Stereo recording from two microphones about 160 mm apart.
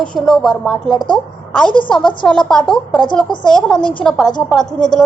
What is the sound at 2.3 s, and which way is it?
A woman's voice, 5° left (ahead or behind).